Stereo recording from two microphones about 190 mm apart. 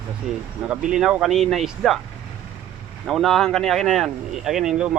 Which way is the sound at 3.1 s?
Centre (ahead or behind).